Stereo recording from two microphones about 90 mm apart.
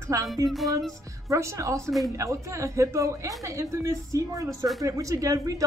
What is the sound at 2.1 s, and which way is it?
A woman's voice, 35° right (ahead or behind).